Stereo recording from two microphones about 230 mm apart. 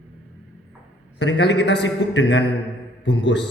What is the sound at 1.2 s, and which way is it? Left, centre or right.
Mantra, left.